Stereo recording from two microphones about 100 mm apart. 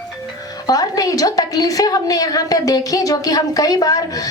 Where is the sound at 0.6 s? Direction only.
40° left (ahead or behind).